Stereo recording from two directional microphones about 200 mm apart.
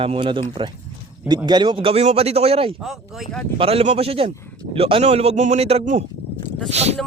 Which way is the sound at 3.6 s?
30° right (ahead or behind).